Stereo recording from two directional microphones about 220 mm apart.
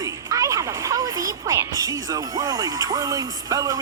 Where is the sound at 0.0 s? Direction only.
15° right (ahead or behind).